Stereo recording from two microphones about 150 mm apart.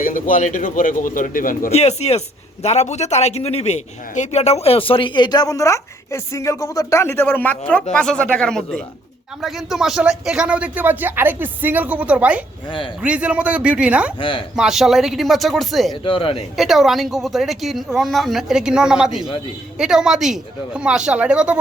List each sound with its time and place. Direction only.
0.0 s a man's voice: 65° left (ahead or behind)
1.7 s speech: 45° left (ahead or behind); by 14.1 s 10° right (ahead or behind)
14.2 s speech: 35° left (ahead or behind)
14.5 s speech: 5° right (ahead or behind)
16.0 s speech: 35° left (ahead or behind)
16.6 s speech: centre (ahead or behind)